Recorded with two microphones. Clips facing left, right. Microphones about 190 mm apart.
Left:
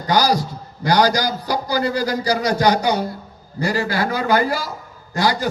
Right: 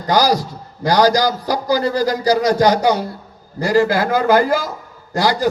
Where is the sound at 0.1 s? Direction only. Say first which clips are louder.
Right 2 dB; 40° right (ahead or behind).